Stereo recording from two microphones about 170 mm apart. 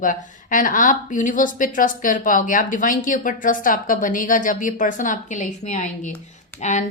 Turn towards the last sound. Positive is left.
turn(degrees=45)  # may be behind; listen again after turning